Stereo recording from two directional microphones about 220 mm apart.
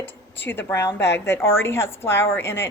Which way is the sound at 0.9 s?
50° left (ahead or behind).